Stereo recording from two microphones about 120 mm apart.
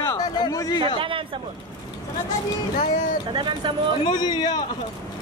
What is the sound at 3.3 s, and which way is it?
Speech, 40° right (ahead or behind).